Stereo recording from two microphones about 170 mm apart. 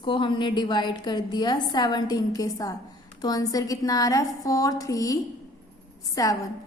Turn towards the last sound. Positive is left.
turn(degrees=20)  # may be behind; listen again after turning